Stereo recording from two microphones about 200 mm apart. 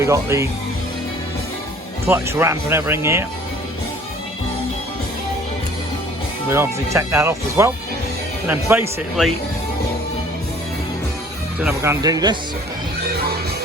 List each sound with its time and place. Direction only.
0.0 s speech: 15° right (ahead or behind)
2.0 s speech: 15° right (ahead or behind)
6.5 s speech: 15° right (ahead or behind)
11.6 s speech: 15° right (ahead or behind)